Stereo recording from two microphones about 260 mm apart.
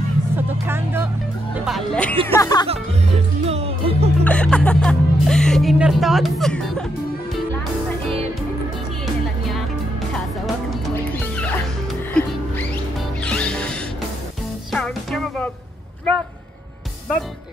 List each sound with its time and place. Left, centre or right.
0.4 s music: centre
1.5 s speech: centre
2.2 s speech: centre
3.4 s music: right
4.2 s speech: centre
10.1 s music: centre